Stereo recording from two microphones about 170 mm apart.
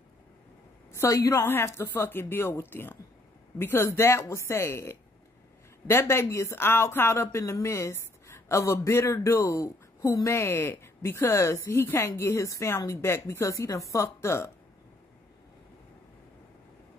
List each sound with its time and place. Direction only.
0.9 s speech: 15° left (ahead or behind)